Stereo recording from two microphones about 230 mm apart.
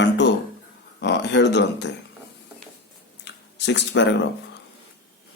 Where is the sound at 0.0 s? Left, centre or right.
Left.